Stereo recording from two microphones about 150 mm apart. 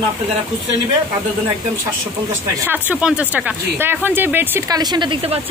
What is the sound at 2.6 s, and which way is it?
Speech, 10° right (ahead or behind).